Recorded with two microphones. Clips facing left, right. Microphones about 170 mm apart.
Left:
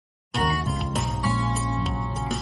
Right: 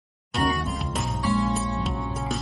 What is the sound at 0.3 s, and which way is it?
Music, centre (ahead or behind).